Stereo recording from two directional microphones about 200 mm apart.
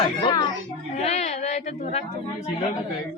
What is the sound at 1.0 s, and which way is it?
Speech, 35° left (ahead or behind).